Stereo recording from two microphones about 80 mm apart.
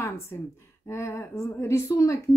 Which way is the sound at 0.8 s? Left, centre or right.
Left.